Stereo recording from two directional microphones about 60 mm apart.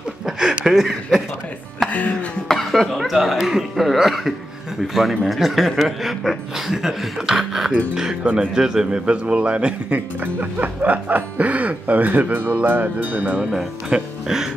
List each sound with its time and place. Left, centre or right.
0.3 s a sound: centre
0.7 s speech: centre
1.9 s music: left
2.4 s speech: centre; by 13.4 s right
13.8 s speech: centre